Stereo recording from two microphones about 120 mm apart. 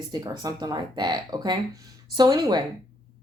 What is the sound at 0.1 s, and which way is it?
Speech, 30° right (ahead or behind).